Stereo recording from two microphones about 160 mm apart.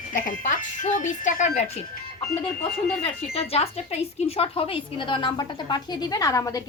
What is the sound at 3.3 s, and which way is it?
A woman's voice, 40° left (ahead or behind).